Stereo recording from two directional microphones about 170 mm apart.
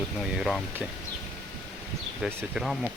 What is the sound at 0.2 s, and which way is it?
Speech, 5° right (ahead or behind).